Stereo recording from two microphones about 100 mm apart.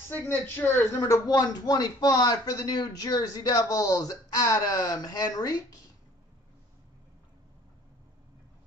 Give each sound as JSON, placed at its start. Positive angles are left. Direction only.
{"t": 0.1, "sound": "speech", "side_deg": 20}
{"t": 1.0, "sound": "a man's voice", "side_deg": 35}